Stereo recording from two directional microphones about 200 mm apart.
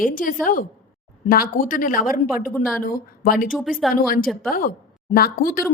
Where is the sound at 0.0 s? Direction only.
45° left (ahead or behind).